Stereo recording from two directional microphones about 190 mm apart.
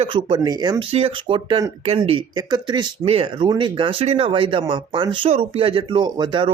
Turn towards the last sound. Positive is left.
turn(degrees=-25)  # may be behind; listen again after turning